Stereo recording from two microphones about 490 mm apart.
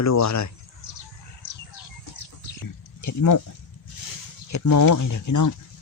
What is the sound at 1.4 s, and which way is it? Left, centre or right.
Bird, left.